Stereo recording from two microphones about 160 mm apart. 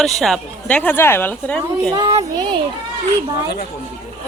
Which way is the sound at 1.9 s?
25° right (ahead or behind).